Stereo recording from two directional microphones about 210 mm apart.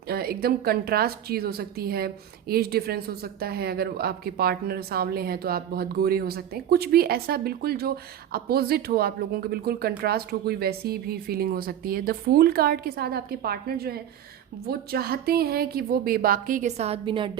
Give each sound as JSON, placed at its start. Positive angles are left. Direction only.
{"t": 0.1, "sound": "a woman's voice", "side_deg": -45}